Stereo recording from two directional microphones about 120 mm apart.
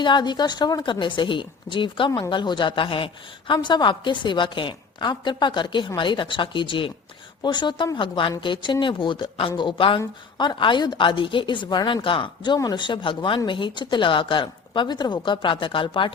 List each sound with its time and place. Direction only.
0.0 s a woman's voice: 40° left (ahead or behind)